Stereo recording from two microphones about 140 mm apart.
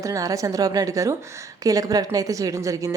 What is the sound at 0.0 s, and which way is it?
Speech, 25° right (ahead or behind).